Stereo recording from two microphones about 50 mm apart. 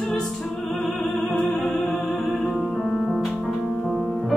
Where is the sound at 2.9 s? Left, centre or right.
Centre.